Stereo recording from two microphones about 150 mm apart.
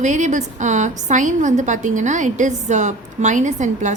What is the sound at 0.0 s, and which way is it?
A woman's voice, 55° right (ahead or behind).